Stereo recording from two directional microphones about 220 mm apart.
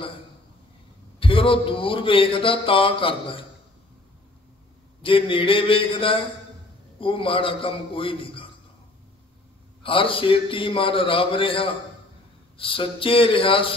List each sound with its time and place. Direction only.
1.2 s speech: 25° left (ahead or behind)
5.0 s speech: 25° left (ahead or behind)
9.8 s speech: 25° left (ahead or behind)